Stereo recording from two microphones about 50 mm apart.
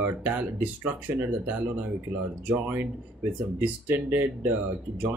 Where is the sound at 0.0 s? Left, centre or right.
Right.